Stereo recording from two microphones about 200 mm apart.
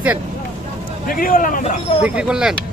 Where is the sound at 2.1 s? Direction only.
5° right (ahead or behind).